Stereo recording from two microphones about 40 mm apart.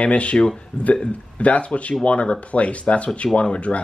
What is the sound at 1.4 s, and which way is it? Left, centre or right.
Speech, left.